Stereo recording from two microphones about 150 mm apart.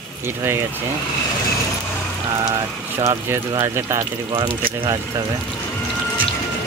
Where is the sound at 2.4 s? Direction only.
20° right (ahead or behind).